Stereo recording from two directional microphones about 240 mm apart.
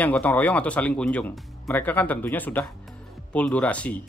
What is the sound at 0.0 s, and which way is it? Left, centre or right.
Speech, centre.